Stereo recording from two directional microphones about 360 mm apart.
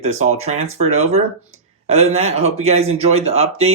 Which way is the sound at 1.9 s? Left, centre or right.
Centre.